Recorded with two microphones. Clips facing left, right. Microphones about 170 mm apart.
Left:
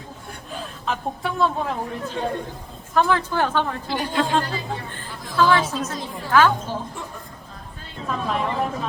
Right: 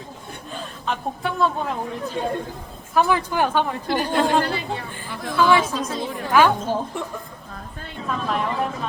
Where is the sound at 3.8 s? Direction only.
60° right (ahead or behind).